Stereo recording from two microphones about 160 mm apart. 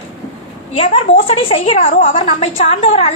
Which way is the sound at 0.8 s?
35° left (ahead or behind).